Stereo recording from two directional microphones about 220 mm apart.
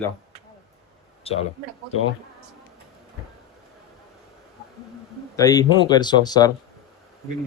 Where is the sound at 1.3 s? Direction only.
25° left (ahead or behind).